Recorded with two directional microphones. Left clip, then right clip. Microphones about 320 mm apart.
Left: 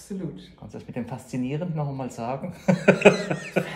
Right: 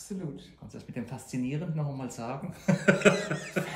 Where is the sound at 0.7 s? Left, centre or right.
Centre.